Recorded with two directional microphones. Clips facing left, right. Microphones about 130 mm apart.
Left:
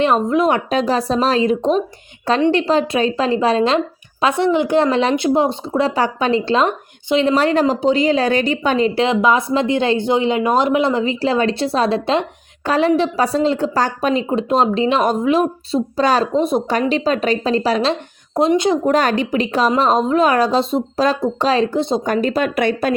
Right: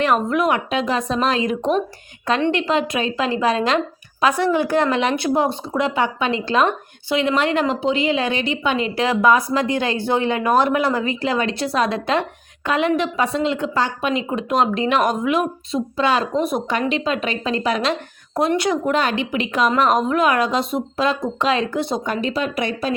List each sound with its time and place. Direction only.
0.0 s speech: 25° left (ahead or behind)
9.0 s speech: 20° left (ahead or behind)
16.9 s speech: 35° left (ahead or behind)
18.3 s speech: 20° left (ahead or behind)
18.9 s speech: 40° left (ahead or behind); by 22.0 s 25° left (ahead or behind)
22.0 s speech: 45° left (ahead or behind)